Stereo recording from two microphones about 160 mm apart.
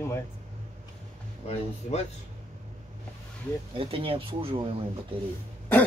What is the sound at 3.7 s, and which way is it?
Speech, 35° right (ahead or behind).